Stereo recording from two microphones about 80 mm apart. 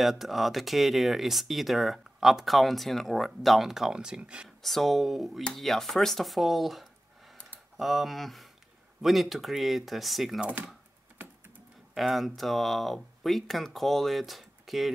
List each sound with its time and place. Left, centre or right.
0.0 s speech: centre
4.6 s speech: centre
10.4 s speech: centre
11.9 s speech: centre